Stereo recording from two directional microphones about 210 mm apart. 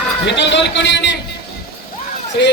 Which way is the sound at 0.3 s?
55° left (ahead or behind).